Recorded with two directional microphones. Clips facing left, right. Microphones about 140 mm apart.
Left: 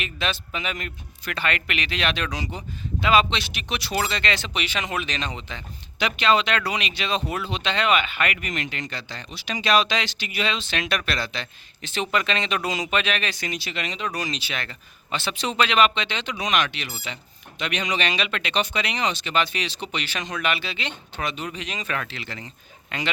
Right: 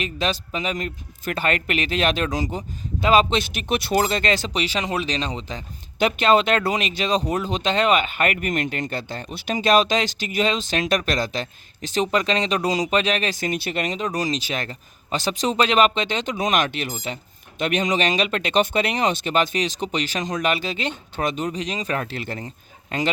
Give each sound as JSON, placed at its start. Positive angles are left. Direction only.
{"t": 0.0, "sound": "a man's voice", "side_deg": -35}